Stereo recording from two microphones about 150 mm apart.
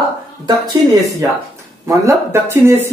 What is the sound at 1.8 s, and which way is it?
Speech, 20° right (ahead or behind).